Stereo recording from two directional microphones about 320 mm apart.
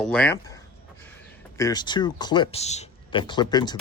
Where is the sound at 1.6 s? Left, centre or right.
Centre.